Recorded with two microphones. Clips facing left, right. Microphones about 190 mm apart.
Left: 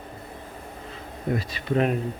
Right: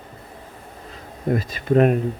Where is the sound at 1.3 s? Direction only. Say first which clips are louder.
Right 7 dB; 50° right (ahead or behind).